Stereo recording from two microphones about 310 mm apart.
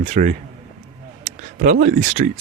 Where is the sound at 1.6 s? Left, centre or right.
Right.